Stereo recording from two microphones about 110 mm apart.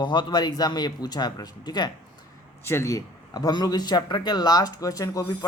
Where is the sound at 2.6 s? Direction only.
20° left (ahead or behind).